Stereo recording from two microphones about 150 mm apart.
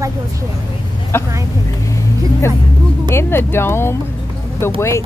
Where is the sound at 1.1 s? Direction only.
15° left (ahead or behind).